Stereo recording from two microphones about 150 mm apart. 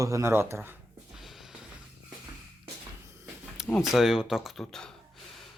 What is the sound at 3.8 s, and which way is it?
Speech, 5° right (ahead or behind).